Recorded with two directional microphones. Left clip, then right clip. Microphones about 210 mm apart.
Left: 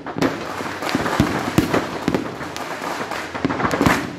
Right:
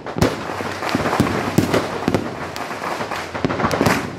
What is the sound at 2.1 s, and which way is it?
Fireworks, 35° right (ahead or behind).